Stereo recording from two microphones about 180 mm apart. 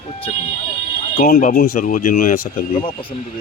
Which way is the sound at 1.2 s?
45° left (ahead or behind).